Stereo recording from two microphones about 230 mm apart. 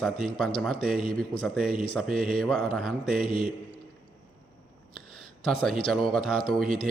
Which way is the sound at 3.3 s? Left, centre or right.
Left.